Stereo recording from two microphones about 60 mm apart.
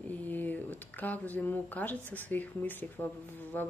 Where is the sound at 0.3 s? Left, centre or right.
Left.